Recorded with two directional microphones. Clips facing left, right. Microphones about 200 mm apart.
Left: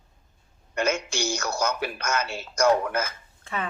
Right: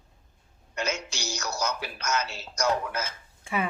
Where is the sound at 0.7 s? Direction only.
55° left (ahead or behind).